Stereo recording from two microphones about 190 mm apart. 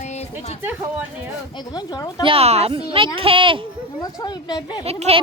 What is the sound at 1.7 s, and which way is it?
Speech, 20° left (ahead or behind).